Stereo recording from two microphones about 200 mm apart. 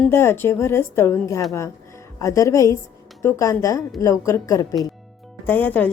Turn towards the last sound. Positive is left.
turn(degrees=10)  # may be behind; listen again after turning